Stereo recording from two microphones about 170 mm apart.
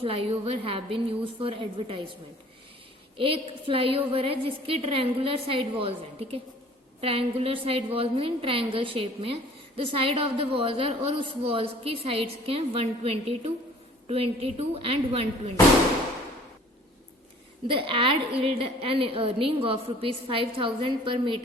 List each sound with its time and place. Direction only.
0.0 s a woman's voice: 35° right (ahead or behind)
3.2 s a woman's voice: 35° right (ahead or behind)
17.7 s a woman's voice: 30° right (ahead or behind)